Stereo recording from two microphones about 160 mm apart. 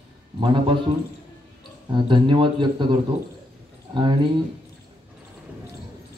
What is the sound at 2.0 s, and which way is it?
Speech, 30° right (ahead or behind).